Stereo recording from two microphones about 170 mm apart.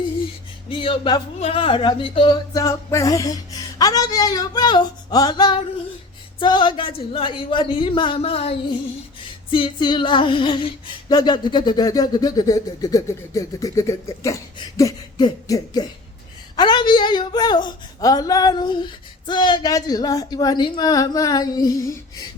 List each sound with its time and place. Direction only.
0.7 s female singing: 30° left (ahead or behind)
6.4 s speech: 30° left (ahead or behind)
9.5 s female singing: 30° left (ahead or behind)